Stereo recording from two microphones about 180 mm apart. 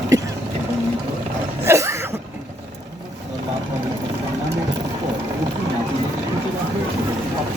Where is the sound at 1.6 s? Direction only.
15° right (ahead or behind).